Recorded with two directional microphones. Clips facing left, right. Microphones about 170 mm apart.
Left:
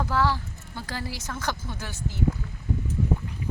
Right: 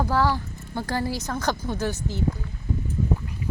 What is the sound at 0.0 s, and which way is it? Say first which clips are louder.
Speech: right 3 dB; 40° right (ahead or behind).